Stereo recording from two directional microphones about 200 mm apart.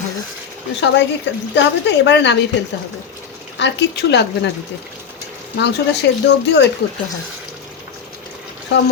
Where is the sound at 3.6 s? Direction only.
60° left (ahead or behind).